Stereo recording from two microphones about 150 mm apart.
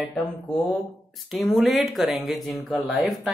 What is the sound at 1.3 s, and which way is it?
Speech, centre (ahead or behind).